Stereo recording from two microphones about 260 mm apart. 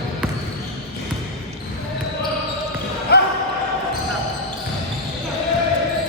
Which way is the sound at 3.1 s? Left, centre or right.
Left.